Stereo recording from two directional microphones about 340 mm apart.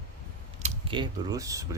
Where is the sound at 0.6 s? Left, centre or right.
Centre.